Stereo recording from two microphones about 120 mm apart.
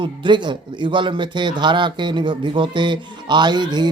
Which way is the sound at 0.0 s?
40° right (ahead or behind).